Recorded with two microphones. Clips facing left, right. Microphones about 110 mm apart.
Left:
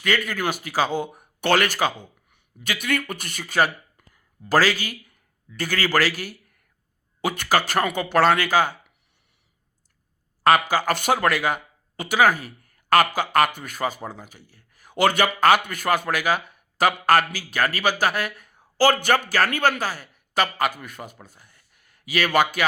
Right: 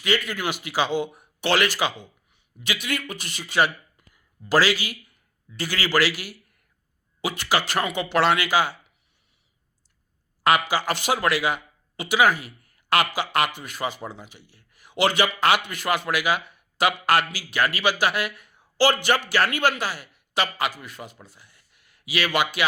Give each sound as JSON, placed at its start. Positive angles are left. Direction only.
{"t": 0.0, "sound": "speech", "side_deg": 45}
{"t": 10.4, "sound": "speech", "side_deg": 45}